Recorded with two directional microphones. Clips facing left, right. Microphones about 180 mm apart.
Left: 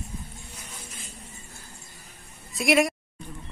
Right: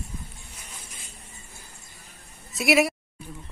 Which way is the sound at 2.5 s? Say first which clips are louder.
Even; 5° right (ahead or behind).